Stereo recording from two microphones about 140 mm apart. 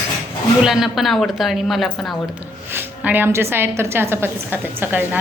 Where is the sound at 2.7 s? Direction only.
10° right (ahead or behind).